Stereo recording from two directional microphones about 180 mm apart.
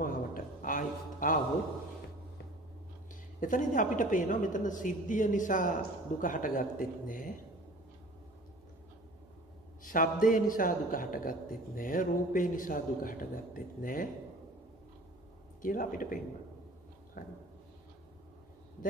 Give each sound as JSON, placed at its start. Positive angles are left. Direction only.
{"t": 0.0, "sound": "a sound", "side_deg": 50}
{"t": 3.3, "sound": "a man's voice", "side_deg": 45}
{"t": 9.8, "sound": "a man's voice", "side_deg": 50}
{"t": 15.6, "sound": "a man's voice", "side_deg": 50}